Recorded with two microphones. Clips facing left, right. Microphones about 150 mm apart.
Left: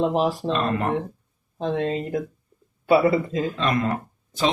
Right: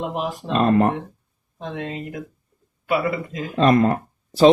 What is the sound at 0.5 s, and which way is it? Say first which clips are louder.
Speech: right 6 dB; 35° right (ahead or behind).